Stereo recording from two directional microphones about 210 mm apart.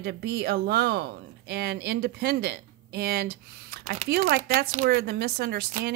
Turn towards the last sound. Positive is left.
turn(degrees=-50)  # may be behind; listen again after turning